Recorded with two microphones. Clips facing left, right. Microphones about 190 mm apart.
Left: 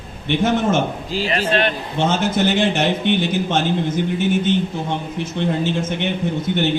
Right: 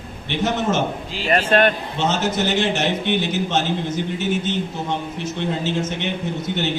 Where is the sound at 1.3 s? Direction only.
50° right (ahead or behind).